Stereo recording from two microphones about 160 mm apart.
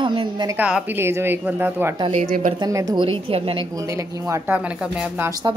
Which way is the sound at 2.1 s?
45° right (ahead or behind).